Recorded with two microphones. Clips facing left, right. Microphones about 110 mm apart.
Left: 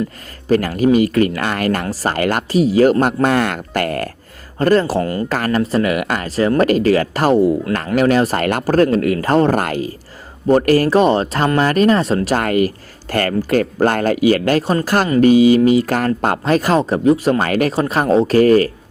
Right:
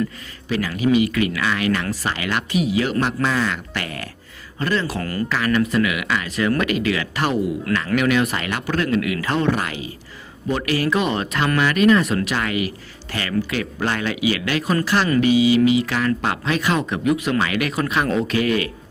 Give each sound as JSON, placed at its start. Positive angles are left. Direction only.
{"t": 0.4, "sound": "speech", "side_deg": 45}
{"t": 4.9, "sound": "speech", "side_deg": 25}
{"t": 5.3, "sound": "speech", "side_deg": 40}
{"t": 12.4, "sound": "speech", "side_deg": 45}